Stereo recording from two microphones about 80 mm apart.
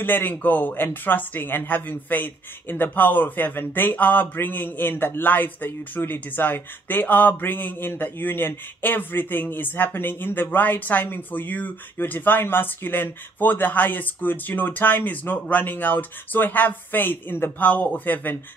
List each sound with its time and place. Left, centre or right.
0.0 s speech: left